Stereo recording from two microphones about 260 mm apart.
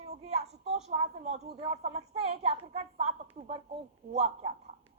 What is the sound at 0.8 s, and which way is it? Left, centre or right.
Speech, right.